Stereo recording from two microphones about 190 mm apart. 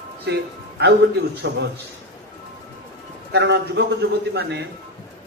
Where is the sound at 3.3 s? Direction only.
65° right (ahead or behind).